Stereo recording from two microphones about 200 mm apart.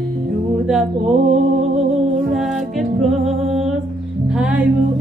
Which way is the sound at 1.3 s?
35° right (ahead or behind).